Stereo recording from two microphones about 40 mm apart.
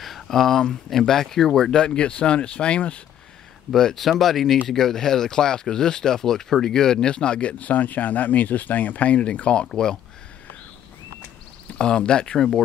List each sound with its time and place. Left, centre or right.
0.0 s a sound: centre
0.7 s speech: centre; by 3.0 s left
3.7 s speech: centre; by 9.2 s left
9.2 s speech: left
9.7 s speech: centre
11.8 s speech: left
12.4 s speech: centre